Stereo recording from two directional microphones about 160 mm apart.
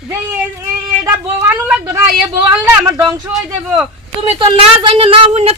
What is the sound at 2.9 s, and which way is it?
Speech, 25° right (ahead or behind).